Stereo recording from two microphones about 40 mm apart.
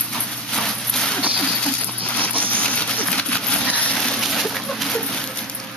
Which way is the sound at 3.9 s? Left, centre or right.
Centre.